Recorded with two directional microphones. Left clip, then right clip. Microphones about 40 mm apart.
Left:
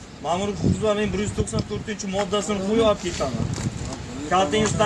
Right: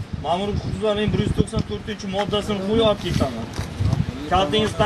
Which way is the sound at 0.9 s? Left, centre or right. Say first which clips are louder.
Right 2 dB; centre.